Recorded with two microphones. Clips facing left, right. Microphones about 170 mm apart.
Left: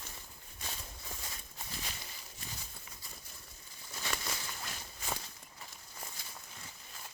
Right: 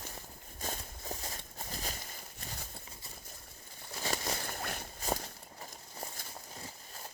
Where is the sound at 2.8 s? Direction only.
30° right (ahead or behind).